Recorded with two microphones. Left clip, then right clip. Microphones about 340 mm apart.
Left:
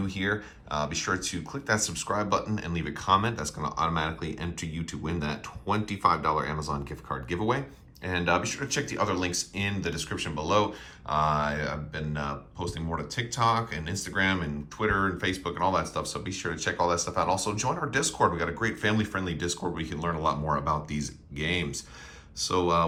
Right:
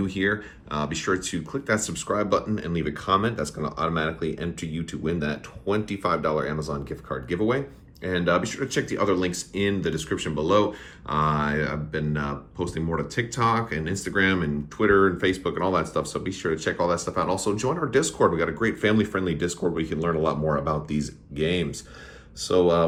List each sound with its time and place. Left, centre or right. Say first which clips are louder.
0.0 s speech: right 5 dB; centre
4.6 s speech: right 6 dB; centre